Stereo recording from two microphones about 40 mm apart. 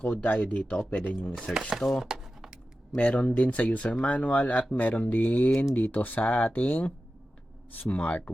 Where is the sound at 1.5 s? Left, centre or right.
Centre.